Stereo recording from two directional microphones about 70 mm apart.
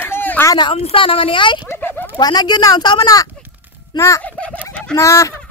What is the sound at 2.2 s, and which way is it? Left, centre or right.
Speech, left.